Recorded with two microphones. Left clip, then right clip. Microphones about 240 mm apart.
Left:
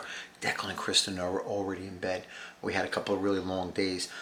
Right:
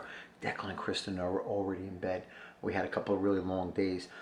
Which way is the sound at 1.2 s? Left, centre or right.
Centre.